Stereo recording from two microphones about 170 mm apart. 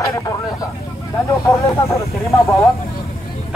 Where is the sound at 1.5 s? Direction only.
20° left (ahead or behind).